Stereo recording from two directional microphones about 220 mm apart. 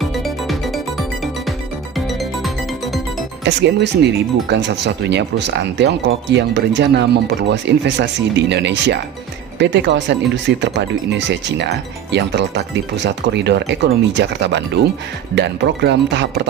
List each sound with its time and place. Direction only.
0.0 s music: centre (ahead or behind)
3.4 s speech: 50° right (ahead or behind)